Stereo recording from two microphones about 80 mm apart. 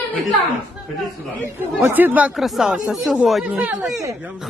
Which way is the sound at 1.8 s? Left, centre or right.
Right.